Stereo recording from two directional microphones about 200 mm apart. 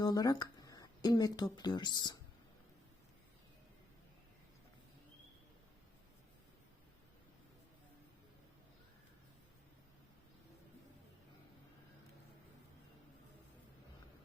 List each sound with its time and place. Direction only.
0.0 s speech: 20° left (ahead or behind)